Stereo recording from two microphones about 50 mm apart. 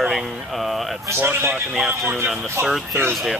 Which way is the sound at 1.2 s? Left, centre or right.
Right.